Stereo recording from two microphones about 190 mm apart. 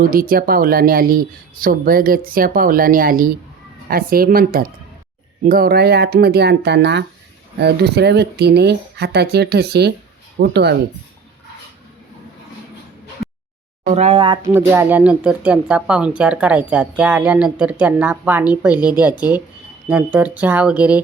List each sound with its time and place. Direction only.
0.0 s speech: 50° right (ahead or behind)
13.8 s speech: 35° right (ahead or behind)
14.4 s speech: 15° right (ahead or behind)